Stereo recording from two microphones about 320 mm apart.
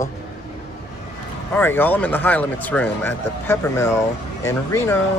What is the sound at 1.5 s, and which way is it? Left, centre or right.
Speech, centre.